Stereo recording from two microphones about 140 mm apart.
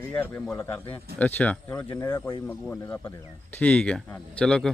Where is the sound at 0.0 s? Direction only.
15° left (ahead or behind).